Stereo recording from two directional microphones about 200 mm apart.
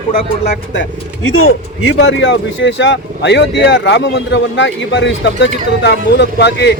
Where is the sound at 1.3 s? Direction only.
85° left.